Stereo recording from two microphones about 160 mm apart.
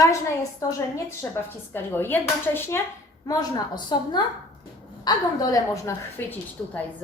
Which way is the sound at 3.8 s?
25° left (ahead or behind).